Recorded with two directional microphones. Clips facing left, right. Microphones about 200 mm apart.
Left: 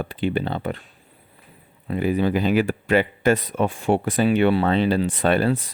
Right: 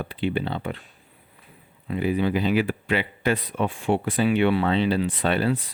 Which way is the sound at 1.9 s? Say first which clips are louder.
Left 2 dB; 45° left (ahead or behind).